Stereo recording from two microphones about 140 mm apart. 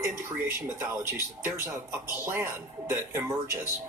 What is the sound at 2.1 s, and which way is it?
Speech, 20° right (ahead or behind).